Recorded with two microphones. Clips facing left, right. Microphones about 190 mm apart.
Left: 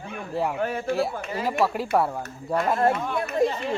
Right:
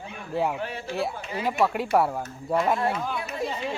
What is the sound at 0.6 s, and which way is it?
Speech, 50° left (ahead or behind).